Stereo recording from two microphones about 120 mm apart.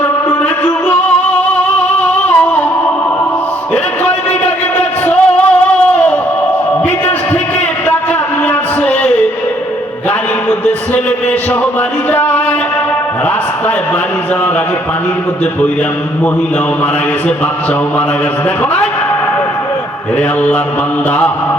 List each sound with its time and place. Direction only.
0.3 s music: 15° left (ahead or behind)
2.0 s a sound: 15° left (ahead or behind)
4.0 s music: 15° left (ahead or behind)